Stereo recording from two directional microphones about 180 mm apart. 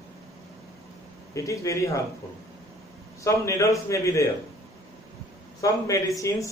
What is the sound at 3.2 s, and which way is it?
Speech, 15° left (ahead or behind).